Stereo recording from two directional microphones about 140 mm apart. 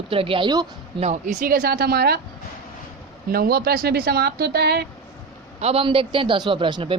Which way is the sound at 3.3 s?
90° right.